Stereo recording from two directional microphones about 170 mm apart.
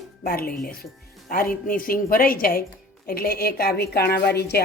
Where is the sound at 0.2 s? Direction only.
60° left (ahead or behind).